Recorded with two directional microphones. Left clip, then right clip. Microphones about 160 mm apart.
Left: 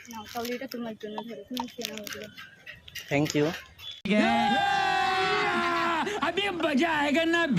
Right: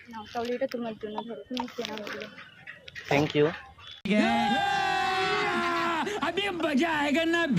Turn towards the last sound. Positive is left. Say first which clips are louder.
# left 1 dB
turn(degrees=0)  # may be behind; listen again after turning